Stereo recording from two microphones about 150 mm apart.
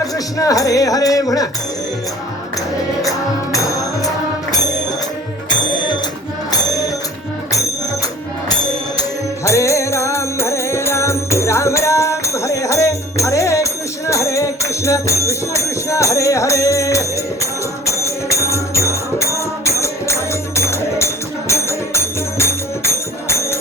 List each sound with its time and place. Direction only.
0.0 s music: 25° left (ahead or behind)
3.0 s music: 20° left (ahead or behind)
5.5 s music: 30° left (ahead or behind)
9.0 s music: 20° left (ahead or behind)